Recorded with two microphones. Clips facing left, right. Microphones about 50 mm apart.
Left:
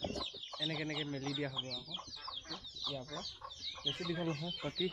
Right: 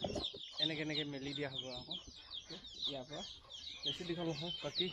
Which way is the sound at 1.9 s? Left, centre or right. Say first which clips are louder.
Left 5 dB; left.